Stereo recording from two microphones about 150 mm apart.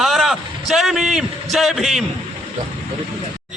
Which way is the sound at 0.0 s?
Centre (ahead or behind).